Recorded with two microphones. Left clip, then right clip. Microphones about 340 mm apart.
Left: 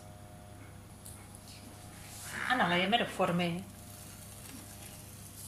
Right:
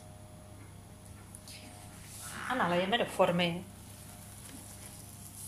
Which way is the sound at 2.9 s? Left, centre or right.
Right.